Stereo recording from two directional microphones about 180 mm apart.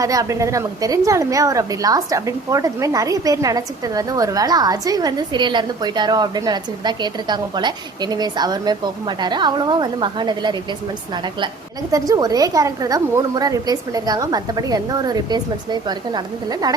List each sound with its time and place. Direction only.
0.0 s a woman's voice: 20° right (ahead or behind)
11.9 s a woman's voice: 20° right (ahead or behind)